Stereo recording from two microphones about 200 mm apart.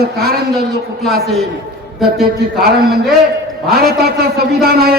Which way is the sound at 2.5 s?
Centre (ahead or behind).